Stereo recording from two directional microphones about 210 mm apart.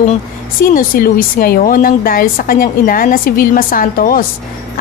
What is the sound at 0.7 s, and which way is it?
A woman's voice, 45° left (ahead or behind).